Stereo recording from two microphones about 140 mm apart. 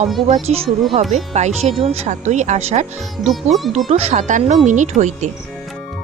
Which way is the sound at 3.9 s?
50° right (ahead or behind).